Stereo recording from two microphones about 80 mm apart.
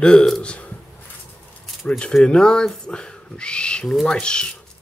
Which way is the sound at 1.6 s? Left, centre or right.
Centre.